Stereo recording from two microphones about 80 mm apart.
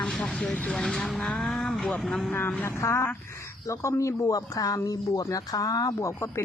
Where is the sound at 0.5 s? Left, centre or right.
Centre.